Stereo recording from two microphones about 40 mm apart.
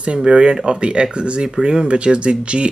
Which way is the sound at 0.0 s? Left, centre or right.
Right.